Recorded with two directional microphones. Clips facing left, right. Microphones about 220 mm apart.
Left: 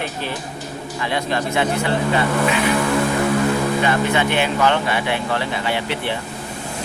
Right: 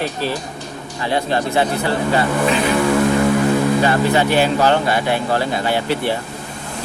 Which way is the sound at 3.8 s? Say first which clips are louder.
Right 3 dB; 35° right (ahead or behind).